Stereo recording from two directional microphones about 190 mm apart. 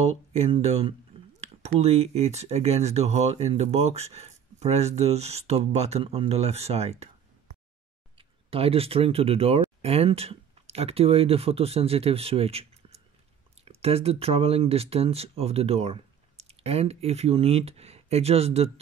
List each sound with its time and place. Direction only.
0.0 s speech: 35° right (ahead or behind)
8.2 s speech: 30° right (ahead or behind)